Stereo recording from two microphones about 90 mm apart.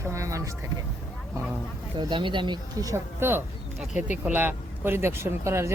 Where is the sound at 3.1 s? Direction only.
25° right (ahead or behind).